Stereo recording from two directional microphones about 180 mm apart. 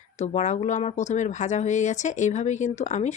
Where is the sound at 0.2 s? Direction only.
40° left (ahead or behind).